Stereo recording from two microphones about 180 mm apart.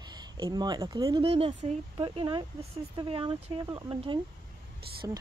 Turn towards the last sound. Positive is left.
turn(degrees=-20)  # may be behind; listen again after turning